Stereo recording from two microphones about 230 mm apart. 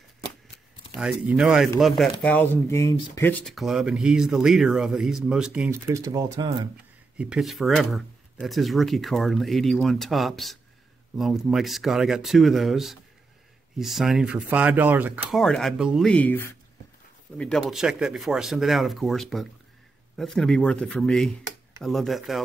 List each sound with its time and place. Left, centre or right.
0.9 s speech: centre
7.2 s speech: centre